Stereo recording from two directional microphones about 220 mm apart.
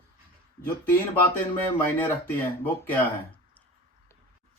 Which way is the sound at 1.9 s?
10° left (ahead or behind).